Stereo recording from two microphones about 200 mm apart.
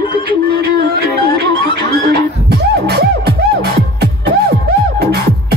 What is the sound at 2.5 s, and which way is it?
Music, 55° right (ahead or behind).